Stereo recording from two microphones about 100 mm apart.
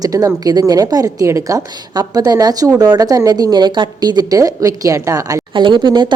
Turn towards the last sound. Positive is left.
turn(degrees=-50)  # may be behind; listen again after turning